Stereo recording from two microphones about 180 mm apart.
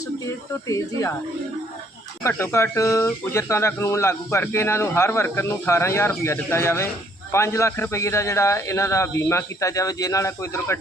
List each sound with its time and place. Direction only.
0.7 s speech: 15° left (ahead or behind)
2.2 s speech: 15° left (ahead or behind)